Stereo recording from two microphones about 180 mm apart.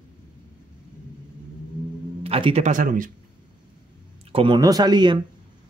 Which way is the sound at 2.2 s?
35° right (ahead or behind).